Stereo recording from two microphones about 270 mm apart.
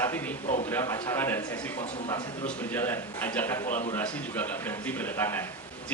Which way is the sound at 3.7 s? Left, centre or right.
Left.